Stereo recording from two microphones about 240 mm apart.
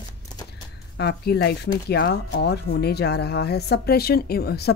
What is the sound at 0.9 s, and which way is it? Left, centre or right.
Speech, left.